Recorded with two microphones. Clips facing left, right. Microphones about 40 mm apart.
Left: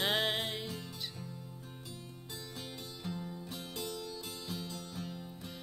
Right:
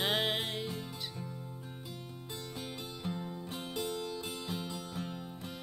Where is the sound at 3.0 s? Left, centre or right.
Centre.